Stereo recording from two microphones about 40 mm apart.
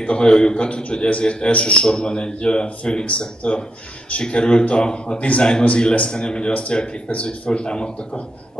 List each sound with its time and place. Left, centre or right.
0.0 s a man's voice: left
6.5 s a man's voice: left